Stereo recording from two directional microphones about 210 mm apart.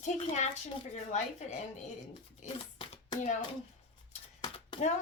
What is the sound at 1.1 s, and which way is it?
Speech, 30° left (ahead or behind).